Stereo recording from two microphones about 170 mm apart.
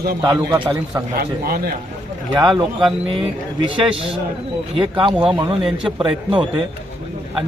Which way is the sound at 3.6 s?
30° right (ahead or behind).